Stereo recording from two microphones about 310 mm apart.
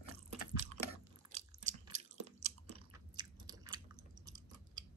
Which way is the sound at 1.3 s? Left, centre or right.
Right.